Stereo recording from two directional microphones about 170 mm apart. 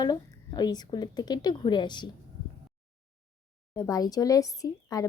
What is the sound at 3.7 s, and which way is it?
A woman's voice, 20° left (ahead or behind).